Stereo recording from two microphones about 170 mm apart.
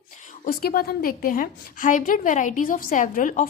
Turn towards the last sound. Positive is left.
turn(degrees=50)  # may be behind; listen again after turning